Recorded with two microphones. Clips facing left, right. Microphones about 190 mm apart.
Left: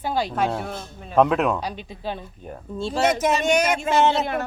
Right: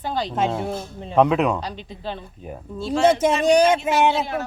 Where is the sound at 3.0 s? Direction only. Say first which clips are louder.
Right 4 dB; 30° right (ahead or behind); by 4.2 s 15° right (ahead or behind).